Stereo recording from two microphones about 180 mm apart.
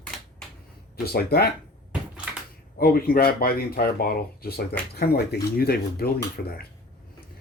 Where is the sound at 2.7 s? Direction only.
55° left (ahead or behind).